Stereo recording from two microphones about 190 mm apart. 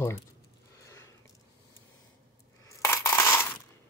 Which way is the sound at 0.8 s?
15° left (ahead or behind).